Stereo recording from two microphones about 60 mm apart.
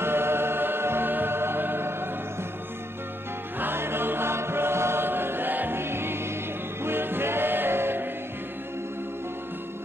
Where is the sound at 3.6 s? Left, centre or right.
Right.